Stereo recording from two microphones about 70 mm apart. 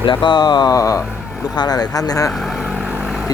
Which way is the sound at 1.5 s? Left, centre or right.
Left.